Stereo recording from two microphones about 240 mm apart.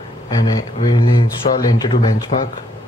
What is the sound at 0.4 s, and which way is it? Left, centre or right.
Speech, centre.